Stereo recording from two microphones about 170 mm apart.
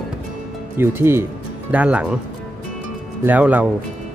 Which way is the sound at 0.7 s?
15° right (ahead or behind).